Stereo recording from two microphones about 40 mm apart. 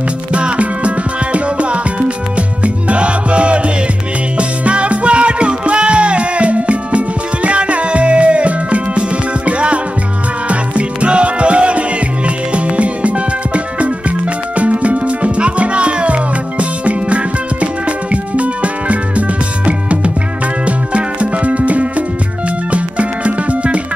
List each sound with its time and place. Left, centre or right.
0.3 s music: right